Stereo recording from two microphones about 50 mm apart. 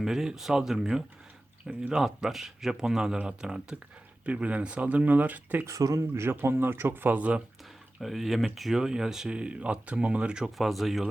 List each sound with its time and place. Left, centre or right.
0.0 s speech: centre
4.3 s speech: right
5.6 s speech: right
6.2 s speech: right
8.0 s speech: centre
10.7 s speech: centre